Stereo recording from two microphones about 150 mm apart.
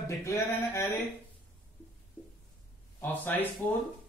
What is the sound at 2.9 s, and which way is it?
Speech, 15° left (ahead or behind).